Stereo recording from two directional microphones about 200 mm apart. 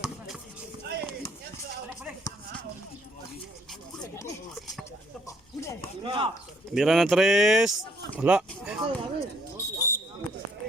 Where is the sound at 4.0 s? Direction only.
15° left (ahead or behind).